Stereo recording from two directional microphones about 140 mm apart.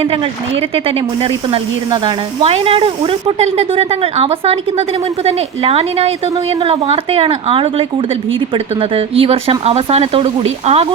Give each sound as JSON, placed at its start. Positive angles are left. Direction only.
{"t": 0.0, "sound": "a woman's voice", "side_deg": -45}